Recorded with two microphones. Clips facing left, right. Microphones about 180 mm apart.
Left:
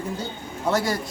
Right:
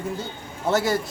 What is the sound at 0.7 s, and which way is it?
Speech, centre (ahead or behind).